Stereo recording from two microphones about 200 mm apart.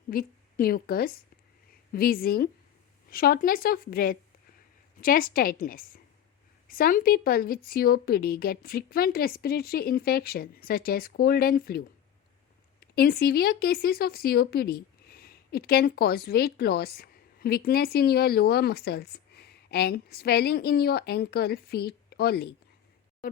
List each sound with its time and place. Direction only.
0.1 s a woman's voice: 45° left (ahead or behind)
12.8 s speech: 50° left (ahead or behind)